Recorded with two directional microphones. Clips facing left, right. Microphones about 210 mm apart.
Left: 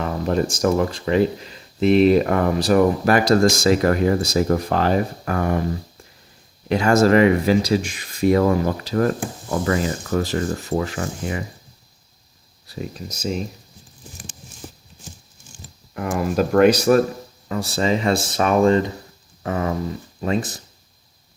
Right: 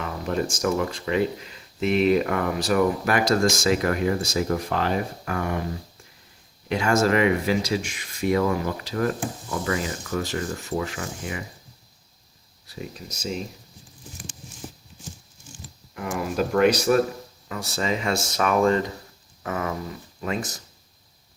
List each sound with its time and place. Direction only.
0.0 s speech: 35° left (ahead or behind)
6.7 s speech: 35° left (ahead or behind)
16.5 s speech: 45° left (ahead or behind); by 18.9 s 25° left (ahead or behind)
19.4 s a sound: 30° left (ahead or behind)
20.2 s speech: 30° left (ahead or behind)